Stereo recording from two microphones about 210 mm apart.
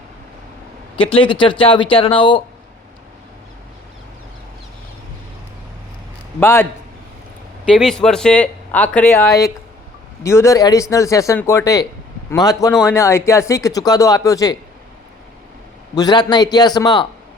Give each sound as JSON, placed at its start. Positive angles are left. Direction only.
{"t": 0.9, "sound": "speech", "side_deg": 25}
{"t": 6.4, "sound": "speech", "side_deg": 10}
{"t": 16.0, "sound": "speech", "side_deg": 20}